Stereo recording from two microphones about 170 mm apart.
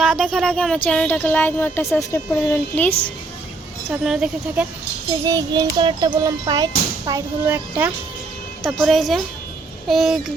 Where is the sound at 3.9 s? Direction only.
5° right (ahead or behind).